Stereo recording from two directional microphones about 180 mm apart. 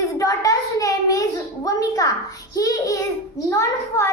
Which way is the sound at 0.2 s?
20° left (ahead or behind).